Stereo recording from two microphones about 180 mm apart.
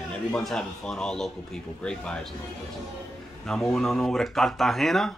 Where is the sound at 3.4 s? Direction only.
Centre (ahead or behind).